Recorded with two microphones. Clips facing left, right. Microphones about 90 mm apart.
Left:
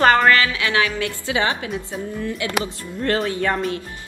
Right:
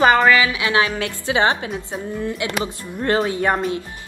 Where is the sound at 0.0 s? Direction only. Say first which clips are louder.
Right 1 dB; 5° right (ahead or behind).